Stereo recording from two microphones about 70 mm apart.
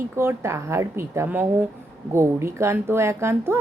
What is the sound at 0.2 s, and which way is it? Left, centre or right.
A woman's voice, right.